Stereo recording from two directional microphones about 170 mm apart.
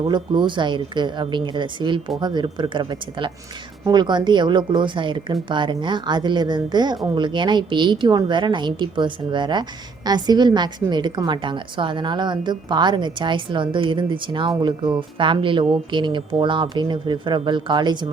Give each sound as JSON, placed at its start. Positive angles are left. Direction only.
{"t": 0.1, "sound": "a woman's voice", "side_deg": -25}